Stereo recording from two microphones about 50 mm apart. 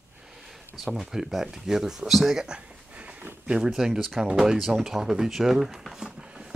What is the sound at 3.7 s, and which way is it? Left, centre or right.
Speech, centre.